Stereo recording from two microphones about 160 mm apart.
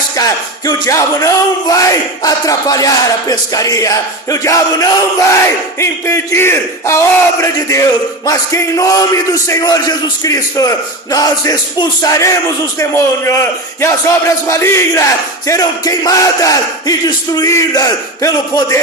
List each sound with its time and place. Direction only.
0.2 s a man's voice: 25° left (ahead or behind)